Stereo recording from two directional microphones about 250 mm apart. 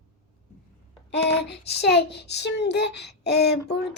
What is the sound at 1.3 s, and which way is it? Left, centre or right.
Speech, left.